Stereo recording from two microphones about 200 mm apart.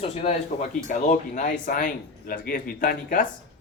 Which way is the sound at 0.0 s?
30° left (ahead or behind).